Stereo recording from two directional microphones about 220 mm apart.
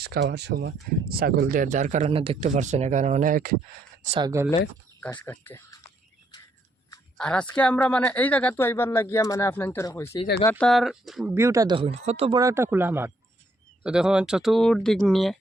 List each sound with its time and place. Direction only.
0.0 s speech: 50° right (ahead or behind)
4.0 s speech: 30° right (ahead or behind)
5.1 s speech: 15° left (ahead or behind)
7.2 s speech: 5° left (ahead or behind)
11.3 s speech: 15° right (ahead or behind)